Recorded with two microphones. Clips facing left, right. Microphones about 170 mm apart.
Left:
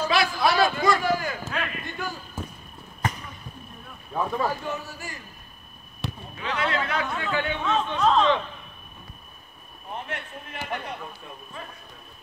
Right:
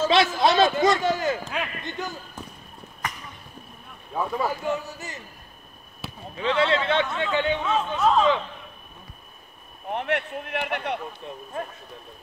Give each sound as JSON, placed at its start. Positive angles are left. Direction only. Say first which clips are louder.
{"t": 0.0, "sound": "a man's voice", "louder": "right 3 dB", "side_deg": -25}
{"t": 1.5, "sound": "a sound", "louder": "right 1 dB", "side_deg": -20}
{"t": 2.4, "sound": "a sound", "louder": "left 4 dB", "side_deg": 5}
{"t": 4.1, "sound": "speech", "louder": "even", "side_deg": -10}
{"t": 4.9, "sound": "a man's voice", "louder": "right 1 dB", "side_deg": -20}
{"t": 6.0, "sound": "basketball bounce", "louder": "left 4 dB", "side_deg": -5}
{"t": 6.4, "sound": "a man's voice", "louder": "right 5 dB", "side_deg": -30}
{"t": 7.6, "sound": "speech", "louder": "even", "side_deg": -10}
{"t": 9.8, "sound": "speech", "louder": "right 8 dB", "side_deg": -70}
{"t": 11.6, "sound": "speech", "louder": "right 9 dB", "side_deg": -50}